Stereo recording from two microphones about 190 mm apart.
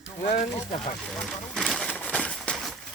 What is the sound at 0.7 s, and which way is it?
Speech, 30° left (ahead or behind).